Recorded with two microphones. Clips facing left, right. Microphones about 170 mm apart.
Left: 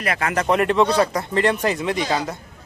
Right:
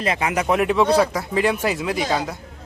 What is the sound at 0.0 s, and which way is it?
Speech, 20° right (ahead or behind).